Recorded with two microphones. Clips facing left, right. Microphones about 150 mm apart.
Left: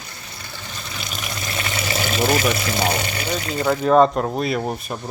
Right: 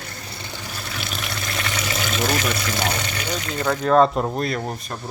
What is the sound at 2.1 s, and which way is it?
Speech, 10° left (ahead or behind).